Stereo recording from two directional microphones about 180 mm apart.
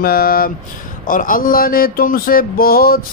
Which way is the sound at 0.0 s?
55° left (ahead or behind).